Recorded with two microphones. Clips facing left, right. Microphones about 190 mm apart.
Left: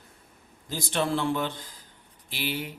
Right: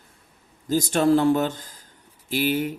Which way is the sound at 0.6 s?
45° right (ahead or behind).